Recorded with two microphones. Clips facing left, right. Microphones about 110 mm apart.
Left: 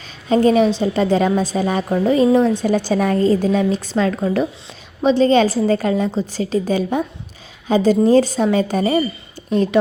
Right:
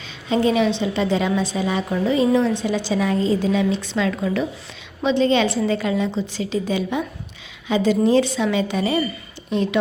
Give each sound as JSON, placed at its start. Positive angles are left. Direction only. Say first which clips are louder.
{"t": 0.3, "sound": "a woman's voice", "louder": "left 5 dB", "side_deg": 45}